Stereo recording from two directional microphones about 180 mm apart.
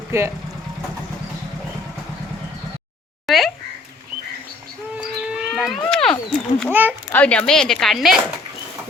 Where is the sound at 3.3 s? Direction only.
Centre (ahead or behind).